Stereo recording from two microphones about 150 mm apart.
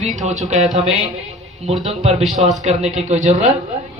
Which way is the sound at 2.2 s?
Centre (ahead or behind).